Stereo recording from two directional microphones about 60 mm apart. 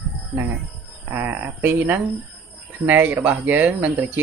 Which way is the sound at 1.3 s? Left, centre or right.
Right.